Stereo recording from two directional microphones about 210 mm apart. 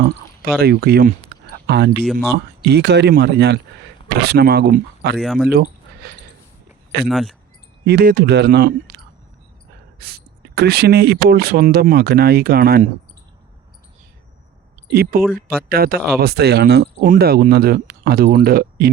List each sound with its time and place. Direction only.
0.0 s a sound: 50° right (ahead or behind)
2.6 s speech: 55° right (ahead or behind)
5.1 s speech: centre (ahead or behind)
6.0 s a sound: 45° right (ahead or behind)
7.0 s speech: centre (ahead or behind)
7.9 s speech: 45° right (ahead or behind)
10.0 s speech: 45° right (ahead or behind)
14.8 s speech: 45° right (ahead or behind)